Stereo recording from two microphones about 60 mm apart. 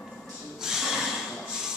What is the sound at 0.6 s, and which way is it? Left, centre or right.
Snort, centre.